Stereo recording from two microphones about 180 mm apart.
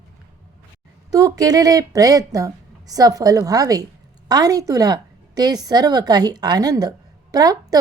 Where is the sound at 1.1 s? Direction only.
20° right (ahead or behind).